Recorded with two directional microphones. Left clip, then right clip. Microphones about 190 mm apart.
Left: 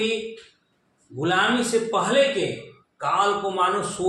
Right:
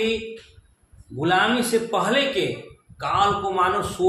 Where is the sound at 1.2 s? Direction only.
30° right (ahead or behind).